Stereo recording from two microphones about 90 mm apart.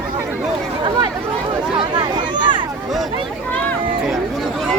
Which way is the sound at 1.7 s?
65° right (ahead or behind).